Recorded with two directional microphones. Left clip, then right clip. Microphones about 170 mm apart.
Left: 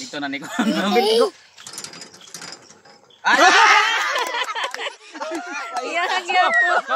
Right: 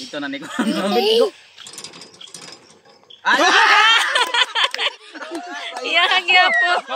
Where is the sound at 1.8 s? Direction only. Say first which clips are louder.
Right 1 dB; 10° left (ahead or behind).